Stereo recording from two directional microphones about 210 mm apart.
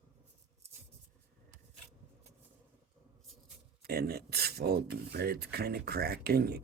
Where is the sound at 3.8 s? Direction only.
50° right (ahead or behind).